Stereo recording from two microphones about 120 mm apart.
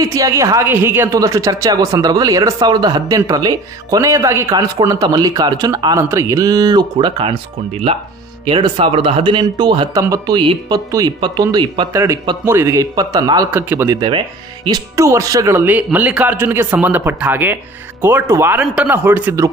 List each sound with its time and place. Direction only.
0.0 s a woman's voice: 30° right (ahead or behind)
10.3 s a man's voice: 45° right (ahead or behind)
10.7 s a man's voice: 30° right (ahead or behind)
11.9 s a woman's voice: 25° right (ahead or behind)
13.9 s a man's voice: 45° right (ahead or behind)
14.7 s a woman's voice: 25° right (ahead or behind)
15.6 s speech: 15° right (ahead or behind)